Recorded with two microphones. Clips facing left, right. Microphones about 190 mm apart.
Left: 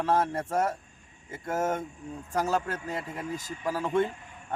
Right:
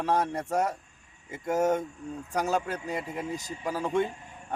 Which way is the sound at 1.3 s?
15° right (ahead or behind).